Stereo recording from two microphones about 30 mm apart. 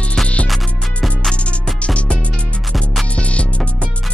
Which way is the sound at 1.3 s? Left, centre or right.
Left.